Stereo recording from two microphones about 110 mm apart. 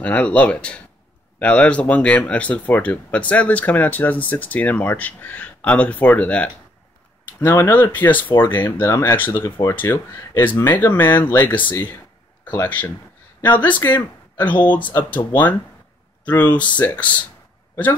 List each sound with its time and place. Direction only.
0.0 s speech: 10° left (ahead or behind)